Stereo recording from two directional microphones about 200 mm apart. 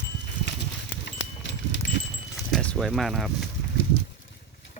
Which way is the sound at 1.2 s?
65° left (ahead or behind).